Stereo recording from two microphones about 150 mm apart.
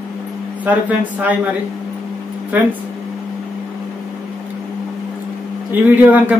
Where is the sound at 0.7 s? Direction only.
10° right (ahead or behind).